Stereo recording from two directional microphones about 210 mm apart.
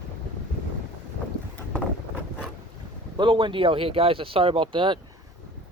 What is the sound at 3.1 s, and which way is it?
Speech, 20° right (ahead or behind).